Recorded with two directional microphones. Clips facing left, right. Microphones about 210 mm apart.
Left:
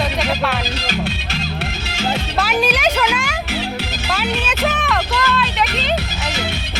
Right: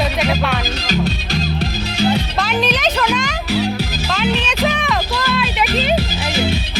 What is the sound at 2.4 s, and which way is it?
Speech, 10° left (ahead or behind).